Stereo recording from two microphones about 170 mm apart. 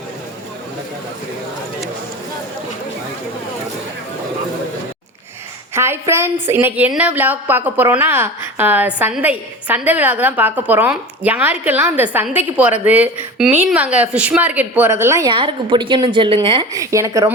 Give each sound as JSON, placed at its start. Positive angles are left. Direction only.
{"t": 5.7, "sound": "a woman's voice", "side_deg": -15}
{"t": 15.3, "sound": "a woman's voice", "side_deg": -30}
{"t": 16.7, "sound": "a woman's voice", "side_deg": -20}